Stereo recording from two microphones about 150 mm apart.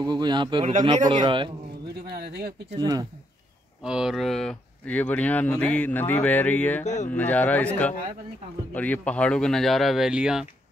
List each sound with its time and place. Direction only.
0.0 s a man's voice: 30° right (ahead or behind)
0.7 s a man's voice: 45° right (ahead or behind)
1.2 s a man's voice: 35° right (ahead or behind)
2.0 s speech: 90° right
2.8 s speech: 25° right (ahead or behind)
3.8 s speech: 5° right (ahead or behind)